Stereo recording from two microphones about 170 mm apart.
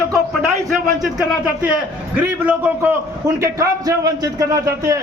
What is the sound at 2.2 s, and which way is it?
A man's voice, 10° right (ahead or behind).